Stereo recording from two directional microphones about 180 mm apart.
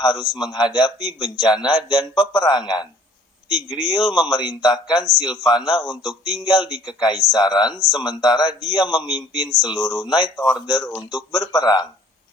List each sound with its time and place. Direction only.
0.0 s speech: 20° left (ahead or behind)
10.3 s speech: 5° left (ahead or behind)
11.1 s speech: 20° left (ahead or behind)